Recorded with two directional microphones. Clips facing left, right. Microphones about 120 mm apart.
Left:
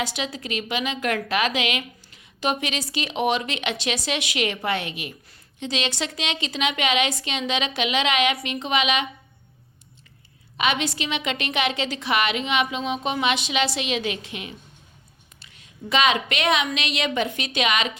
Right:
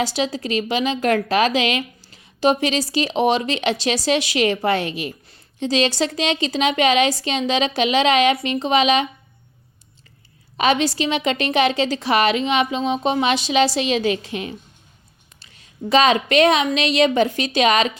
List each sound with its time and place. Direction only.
0.0 s a woman's voice: 35° right (ahead or behind)
10.6 s a woman's voice: 35° right (ahead or behind)